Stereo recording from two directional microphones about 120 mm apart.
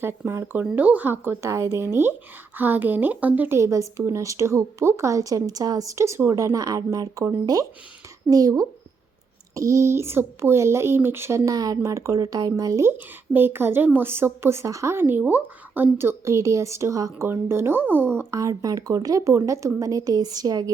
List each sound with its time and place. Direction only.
0.0 s speech: 20° right (ahead or behind)